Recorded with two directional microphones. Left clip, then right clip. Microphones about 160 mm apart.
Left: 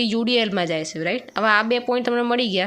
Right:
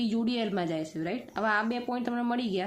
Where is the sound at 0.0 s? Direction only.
20° left (ahead or behind).